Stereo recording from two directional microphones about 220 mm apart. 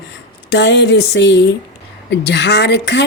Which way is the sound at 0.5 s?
50° left (ahead or behind).